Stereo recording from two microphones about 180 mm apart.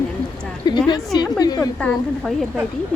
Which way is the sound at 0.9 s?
20° left (ahead or behind).